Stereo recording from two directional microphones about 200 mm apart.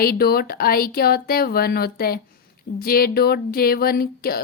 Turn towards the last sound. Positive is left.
turn(degrees=50)  # may be behind; listen again after turning